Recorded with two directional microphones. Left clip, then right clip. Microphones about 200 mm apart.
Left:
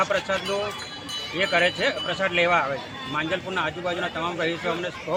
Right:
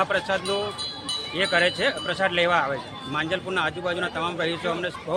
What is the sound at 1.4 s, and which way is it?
Speech, 30° right (ahead or behind).